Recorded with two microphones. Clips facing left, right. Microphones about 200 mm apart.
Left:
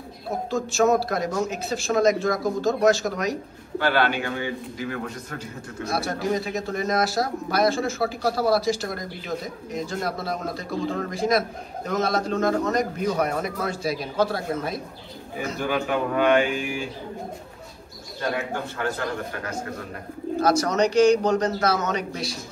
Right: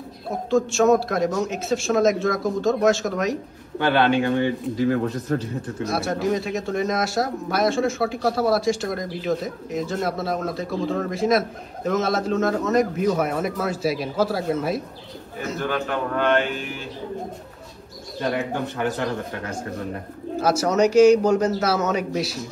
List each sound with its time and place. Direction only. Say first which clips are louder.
0.5 s speech: right 4 dB; centre (ahead or behind)
3.8 s speech: right 3 dB; 20° right (ahead or behind)
4.7 s a man's voice: right 9 dB; 35° right (ahead or behind)
5.9 s speech: right 2 dB; centre (ahead or behind)
15.3 s a man's voice: even; 10° left (ahead or behind)
18.5 s speech: right 3 dB; 20° right (ahead or behind)
20.3 s a man's voice: right 1 dB; 5° right (ahead or behind)